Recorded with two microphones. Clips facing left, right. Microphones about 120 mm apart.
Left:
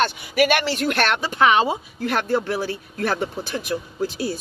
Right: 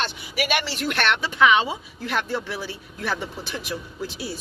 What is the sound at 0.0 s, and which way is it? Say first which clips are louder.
Speech: left 8 dB; 50° left (ahead or behind).